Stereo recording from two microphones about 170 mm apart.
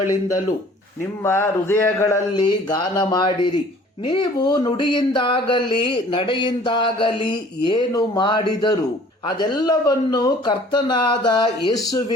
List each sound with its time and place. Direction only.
1.2 s speech: 15° left (ahead or behind)